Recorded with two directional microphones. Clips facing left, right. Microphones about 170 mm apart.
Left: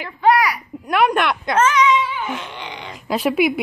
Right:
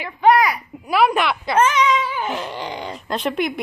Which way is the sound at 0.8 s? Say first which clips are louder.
Even; 5° right (ahead or behind).